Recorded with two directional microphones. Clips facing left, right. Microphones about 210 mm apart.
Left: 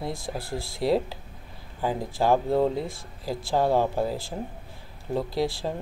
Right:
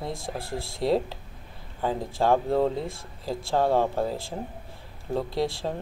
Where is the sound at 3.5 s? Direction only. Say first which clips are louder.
Even; 5° left (ahead or behind).